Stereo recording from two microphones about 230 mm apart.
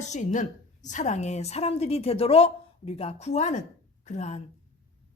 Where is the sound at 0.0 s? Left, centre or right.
Left.